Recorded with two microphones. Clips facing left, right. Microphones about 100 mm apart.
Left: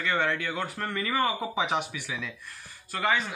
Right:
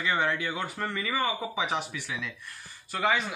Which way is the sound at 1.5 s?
25° left (ahead or behind).